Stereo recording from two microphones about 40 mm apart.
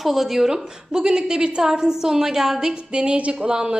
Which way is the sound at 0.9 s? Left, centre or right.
Centre.